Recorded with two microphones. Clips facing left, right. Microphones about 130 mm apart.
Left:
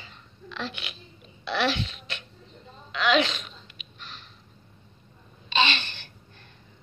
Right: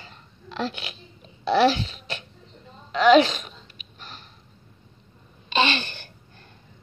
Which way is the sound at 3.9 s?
45° right (ahead or behind).